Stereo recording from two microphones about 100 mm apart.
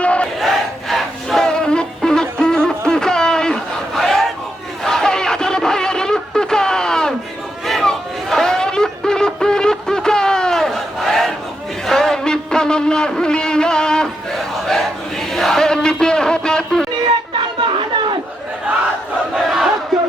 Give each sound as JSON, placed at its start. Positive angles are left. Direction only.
{"t": 0.0, "sound": "battle cry", "side_deg": 10}
{"t": 0.3, "sound": "battle cry", "side_deg": 0}
{"t": 4.8, "sound": "a sound", "side_deg": 5}
{"t": 15.3, "sound": "music", "side_deg": 5}
{"t": 17.6, "sound": "chatter", "side_deg": -55}